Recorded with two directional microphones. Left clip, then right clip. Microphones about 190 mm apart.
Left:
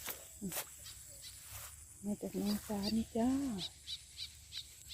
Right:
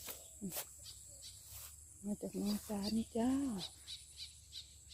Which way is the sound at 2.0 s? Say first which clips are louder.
Left 2 dB; 5° right (ahead or behind).